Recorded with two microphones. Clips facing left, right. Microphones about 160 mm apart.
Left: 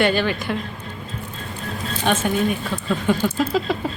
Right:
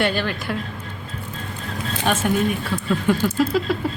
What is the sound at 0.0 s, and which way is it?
Speech, centre (ahead or behind).